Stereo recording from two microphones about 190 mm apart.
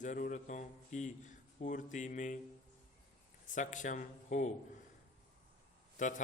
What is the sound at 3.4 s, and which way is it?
Speech, 40° left (ahead or behind).